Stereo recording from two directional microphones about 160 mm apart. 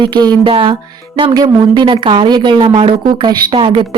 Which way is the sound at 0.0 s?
30° right (ahead or behind).